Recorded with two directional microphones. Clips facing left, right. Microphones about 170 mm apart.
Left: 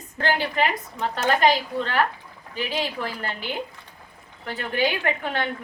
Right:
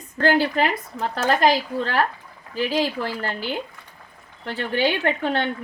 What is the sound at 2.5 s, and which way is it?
A woman's voice, 40° right (ahead or behind).